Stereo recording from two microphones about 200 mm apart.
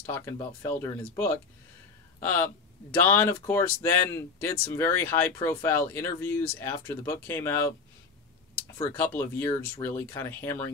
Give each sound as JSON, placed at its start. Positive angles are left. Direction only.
{"t": 0.1, "sound": "speech", "side_deg": 15}
{"t": 8.8, "sound": "speech", "side_deg": 10}